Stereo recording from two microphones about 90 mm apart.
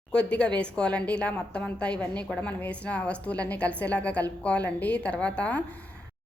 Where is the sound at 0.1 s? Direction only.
10° left (ahead or behind).